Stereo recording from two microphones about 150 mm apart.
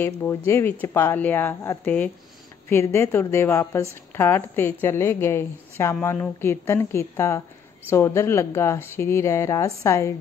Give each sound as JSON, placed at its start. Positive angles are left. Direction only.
{"t": 0.0, "sound": "speech", "side_deg": 15}